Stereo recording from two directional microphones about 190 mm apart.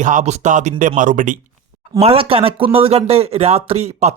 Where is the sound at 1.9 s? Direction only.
30° right (ahead or behind).